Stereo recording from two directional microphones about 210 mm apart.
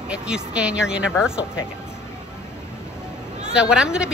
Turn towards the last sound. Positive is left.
turn(degrees=-5)  # may be behind; listen again after turning